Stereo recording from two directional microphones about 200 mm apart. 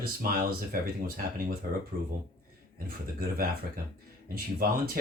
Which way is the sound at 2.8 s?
45° right (ahead or behind).